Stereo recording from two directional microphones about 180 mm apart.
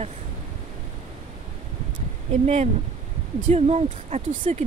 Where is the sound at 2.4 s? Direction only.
35° right (ahead or behind).